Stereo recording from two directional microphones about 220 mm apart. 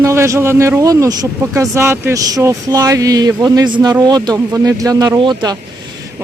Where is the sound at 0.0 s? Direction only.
15° right (ahead or behind).